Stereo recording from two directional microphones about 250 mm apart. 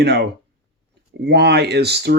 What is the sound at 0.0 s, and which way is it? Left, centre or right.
Speech, right.